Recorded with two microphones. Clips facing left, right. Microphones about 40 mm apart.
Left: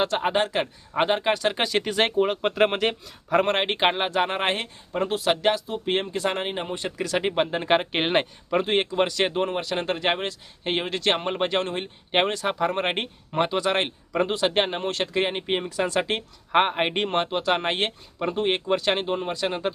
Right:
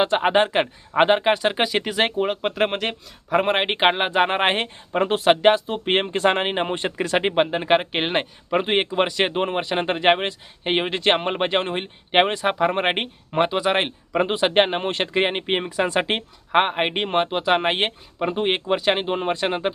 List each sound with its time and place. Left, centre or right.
0.0 s speech: right; by 3.3 s centre
3.3 s speech: centre
8.4 s speech: right
16.6 s speech: centre
19.1 s speech: right